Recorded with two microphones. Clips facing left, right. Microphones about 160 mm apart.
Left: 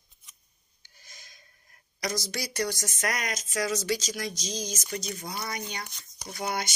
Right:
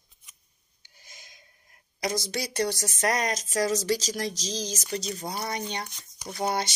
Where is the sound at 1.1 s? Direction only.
20° right (ahead or behind).